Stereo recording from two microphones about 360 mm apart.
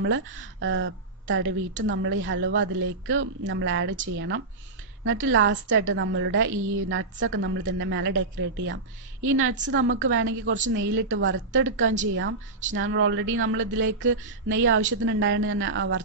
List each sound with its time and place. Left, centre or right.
0.0 s a woman's voice: right
11.9 s a woman's voice: centre
12.8 s a woman's voice: right